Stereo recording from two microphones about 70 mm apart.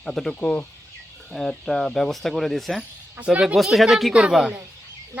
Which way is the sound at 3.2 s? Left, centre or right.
Centre.